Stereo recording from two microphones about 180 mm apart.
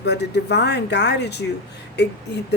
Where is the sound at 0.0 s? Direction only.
70° left (ahead or behind).